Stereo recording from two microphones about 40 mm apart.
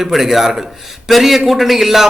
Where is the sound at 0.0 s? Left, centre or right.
Centre.